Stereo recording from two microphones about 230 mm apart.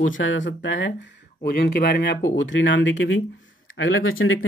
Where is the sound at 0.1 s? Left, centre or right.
Left.